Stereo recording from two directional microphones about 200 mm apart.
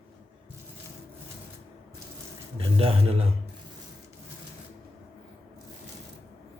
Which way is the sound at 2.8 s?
30° right (ahead or behind).